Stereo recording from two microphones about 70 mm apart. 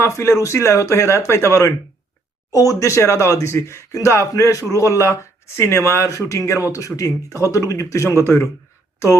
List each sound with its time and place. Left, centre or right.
0.0 s speech: left